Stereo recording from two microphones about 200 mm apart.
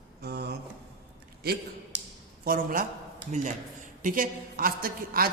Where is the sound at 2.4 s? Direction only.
45° right (ahead or behind).